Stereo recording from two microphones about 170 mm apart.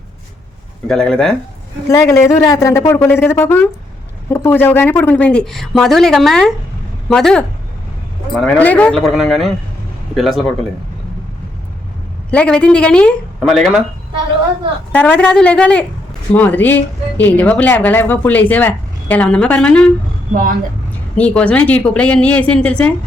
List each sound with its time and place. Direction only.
0.9 s speech: 5° left (ahead or behind)
2.0 s speech: 15° left (ahead or behind); by 10.4 s centre (ahead or behind)
12.3 s speech: 5° left (ahead or behind)
14.9 s speech: 10° left (ahead or behind)
21.2 s speech: 5° left (ahead or behind)